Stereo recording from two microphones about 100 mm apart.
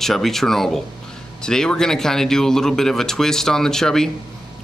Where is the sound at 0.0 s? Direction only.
5° left (ahead or behind).